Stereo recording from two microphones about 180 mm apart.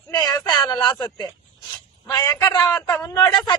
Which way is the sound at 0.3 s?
25° left (ahead or behind).